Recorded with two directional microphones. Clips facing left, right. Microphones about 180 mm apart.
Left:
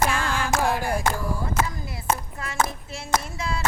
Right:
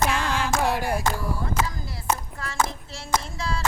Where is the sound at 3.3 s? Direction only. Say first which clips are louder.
Even; 20° left (ahead or behind).